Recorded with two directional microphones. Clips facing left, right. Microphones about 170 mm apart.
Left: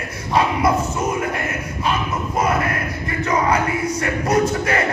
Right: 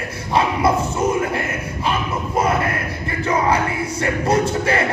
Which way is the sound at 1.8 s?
30° right (ahead or behind).